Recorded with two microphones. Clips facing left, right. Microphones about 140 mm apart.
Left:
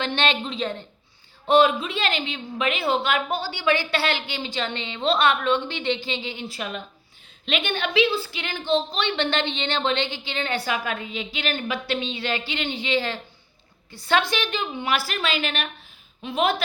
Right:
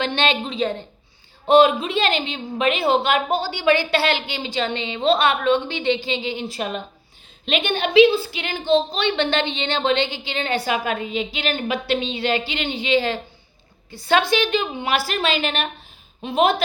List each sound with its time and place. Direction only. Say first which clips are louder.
0.1 s a woman's voice: right 3 dB; 15° right (ahead or behind)
1.5 s a woman's voice: right 4 dB; 20° right (ahead or behind)